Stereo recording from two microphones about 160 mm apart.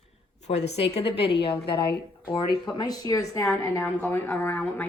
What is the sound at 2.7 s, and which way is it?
A woman's voice, 25° left (ahead or behind).